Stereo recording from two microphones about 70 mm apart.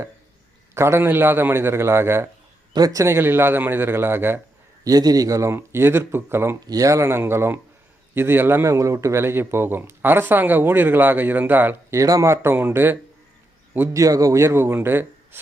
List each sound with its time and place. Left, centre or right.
0.7 s speech: right
2.7 s speech: right
3.1 s speech: right
4.8 s speech: right
6.7 s speech: right
11.9 s speech: right
13.9 s speech: right